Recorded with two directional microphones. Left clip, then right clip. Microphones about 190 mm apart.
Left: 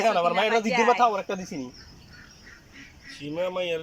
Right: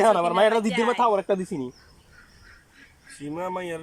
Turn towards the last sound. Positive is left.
turn(degrees=-35)  # may be behind; listen again after turning